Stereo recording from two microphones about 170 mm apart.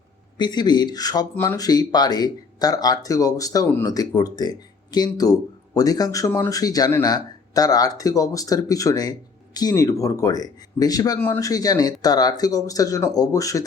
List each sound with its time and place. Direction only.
0.3 s speech: 25° left (ahead or behind)